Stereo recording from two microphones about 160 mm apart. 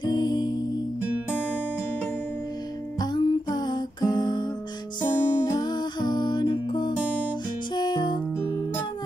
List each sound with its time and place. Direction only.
0.0 s music: 25° left (ahead or behind)
3.0 s music: 25° left (ahead or behind)